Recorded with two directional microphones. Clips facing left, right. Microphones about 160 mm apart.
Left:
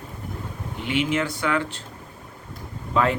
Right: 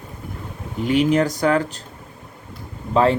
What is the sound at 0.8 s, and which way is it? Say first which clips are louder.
Speech: right 7 dB; 40° right (ahead or behind).